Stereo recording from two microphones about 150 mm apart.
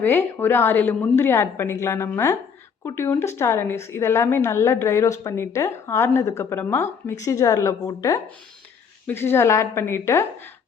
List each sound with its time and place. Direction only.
0.0 s a woman's voice: 15° left (ahead or behind)